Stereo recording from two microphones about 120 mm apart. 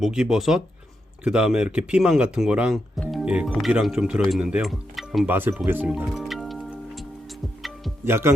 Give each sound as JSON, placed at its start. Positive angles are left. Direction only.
{"t": 0.0, "sound": "speech", "side_deg": -5}
{"t": 3.1, "sound": "music", "side_deg": -5}
{"t": 3.7, "sound": "speech", "side_deg": -5}
{"t": 5.2, "sound": "speech", "side_deg": -15}
{"t": 6.1, "sound": "music", "side_deg": 0}
{"t": 8.0, "sound": "speech", "side_deg": -20}